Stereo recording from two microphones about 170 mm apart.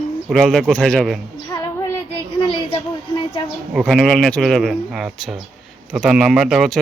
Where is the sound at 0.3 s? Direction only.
Centre (ahead or behind).